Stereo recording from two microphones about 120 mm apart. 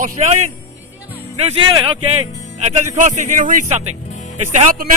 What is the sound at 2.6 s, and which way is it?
Speech, 80° right.